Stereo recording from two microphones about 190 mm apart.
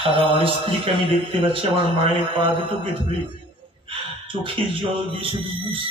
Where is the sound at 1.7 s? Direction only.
30° right (ahead or behind).